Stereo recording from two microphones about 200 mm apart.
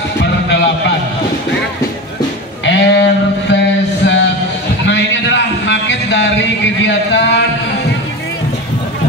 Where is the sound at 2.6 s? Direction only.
60° left (ahead or behind).